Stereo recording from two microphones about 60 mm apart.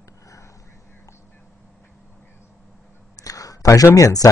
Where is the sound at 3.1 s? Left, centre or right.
Left.